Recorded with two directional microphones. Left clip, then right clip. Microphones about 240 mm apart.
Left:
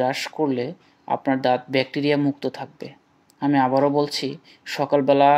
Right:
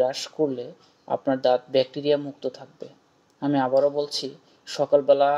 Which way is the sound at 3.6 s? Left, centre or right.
Left.